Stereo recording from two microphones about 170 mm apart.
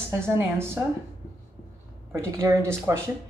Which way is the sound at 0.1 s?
15° right (ahead or behind).